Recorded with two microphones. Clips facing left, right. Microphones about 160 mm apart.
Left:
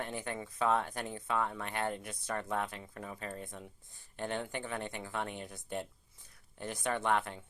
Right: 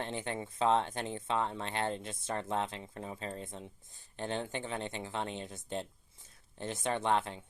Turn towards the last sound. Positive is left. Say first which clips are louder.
# right 1 dB
turn(degrees=-20)  # may be behind; listen again after turning